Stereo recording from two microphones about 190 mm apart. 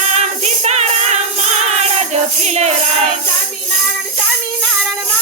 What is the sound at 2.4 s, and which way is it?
Music, 35° right (ahead or behind).